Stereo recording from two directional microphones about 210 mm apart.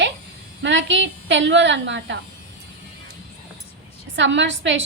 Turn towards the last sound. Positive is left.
turn(degrees=-60)  # may be behind; listen again after turning